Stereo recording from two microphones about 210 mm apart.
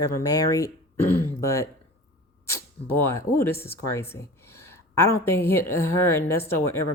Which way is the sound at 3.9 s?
10° left (ahead or behind).